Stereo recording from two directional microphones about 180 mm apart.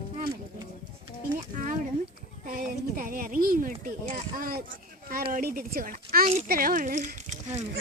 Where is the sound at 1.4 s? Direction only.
45° right (ahead or behind).